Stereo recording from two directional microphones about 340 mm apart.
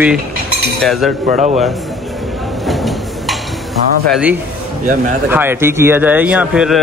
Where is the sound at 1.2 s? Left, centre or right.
Right.